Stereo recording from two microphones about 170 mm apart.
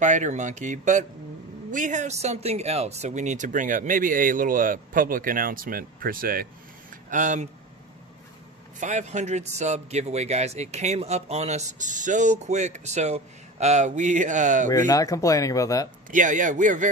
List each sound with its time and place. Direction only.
0.0 s a man's voice: 45° right (ahead or behind)
6.9 s a sound: 50° right (ahead or behind)
8.7 s a man's voice: 45° right (ahead or behind)
14.7 s speech: 20° left (ahead or behind)
16.1 s a man's voice: 50° right (ahead or behind)